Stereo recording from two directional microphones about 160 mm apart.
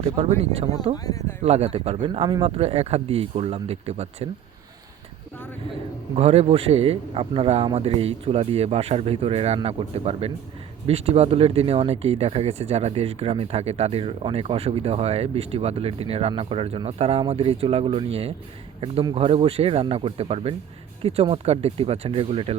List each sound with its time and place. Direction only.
0.0 s speech: 40° right (ahead or behind)
0.9 s speech: 25° left (ahead or behind)
1.4 s speech: 40° right (ahead or behind)
6.1 s speech: 40° right (ahead or behind)